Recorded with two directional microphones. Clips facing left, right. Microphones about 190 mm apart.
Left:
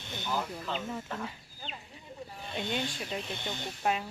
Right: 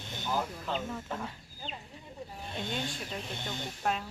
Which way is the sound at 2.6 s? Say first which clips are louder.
Left 2 dB; 5° left (ahead or behind).